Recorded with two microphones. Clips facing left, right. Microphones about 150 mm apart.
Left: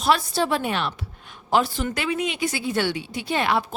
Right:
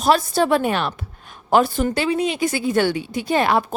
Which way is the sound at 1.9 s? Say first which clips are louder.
Right 5 dB; 30° right (ahead or behind).